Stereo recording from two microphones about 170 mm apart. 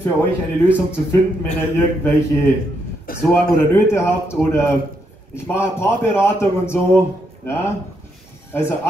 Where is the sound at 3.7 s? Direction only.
15° left (ahead or behind).